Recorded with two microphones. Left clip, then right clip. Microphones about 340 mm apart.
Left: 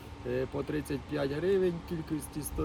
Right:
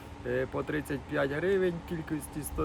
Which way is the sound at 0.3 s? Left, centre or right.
Centre.